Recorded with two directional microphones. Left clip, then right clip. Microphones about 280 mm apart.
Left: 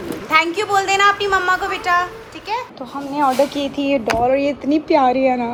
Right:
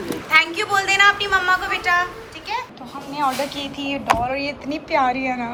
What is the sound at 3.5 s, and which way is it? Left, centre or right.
A woman's voice, centre.